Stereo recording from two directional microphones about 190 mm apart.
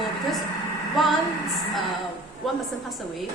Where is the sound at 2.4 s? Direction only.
Centre (ahead or behind).